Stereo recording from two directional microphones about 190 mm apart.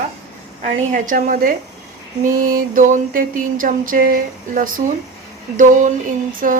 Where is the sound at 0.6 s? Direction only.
40° right (ahead or behind).